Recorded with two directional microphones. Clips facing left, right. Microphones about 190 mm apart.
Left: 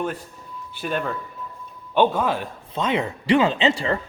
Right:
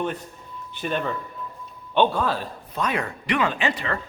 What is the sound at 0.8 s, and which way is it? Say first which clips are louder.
Speech: even; 5° left (ahead or behind).